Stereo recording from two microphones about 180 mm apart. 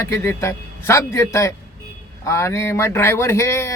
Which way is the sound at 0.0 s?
15° left (ahead or behind).